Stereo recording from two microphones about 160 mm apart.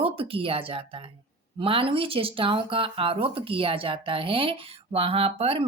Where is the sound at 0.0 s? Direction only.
35° right (ahead or behind).